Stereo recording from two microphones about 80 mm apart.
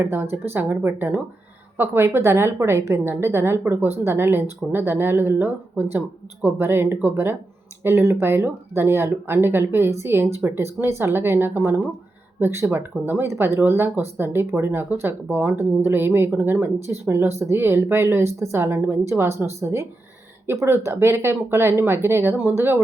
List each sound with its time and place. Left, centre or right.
0.0 s speech: right